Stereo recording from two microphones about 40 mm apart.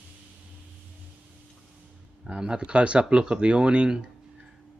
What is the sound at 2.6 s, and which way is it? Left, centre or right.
Speech, right.